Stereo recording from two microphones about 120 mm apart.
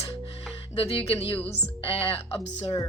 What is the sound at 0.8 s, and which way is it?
A woman's voice, 55° left (ahead or behind).